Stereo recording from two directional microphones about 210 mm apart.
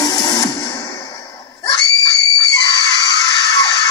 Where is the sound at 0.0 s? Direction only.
15° left (ahead or behind).